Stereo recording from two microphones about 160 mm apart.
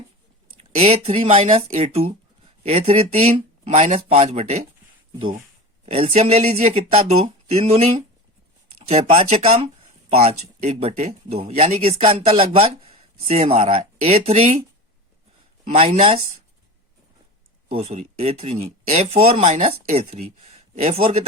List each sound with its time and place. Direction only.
0.8 s speech: 40° right (ahead or behind)
5.8 s speech: 40° right (ahead or behind)
17.7 s speech: 40° right (ahead or behind)
20.5 s a sound: 40° right (ahead or behind)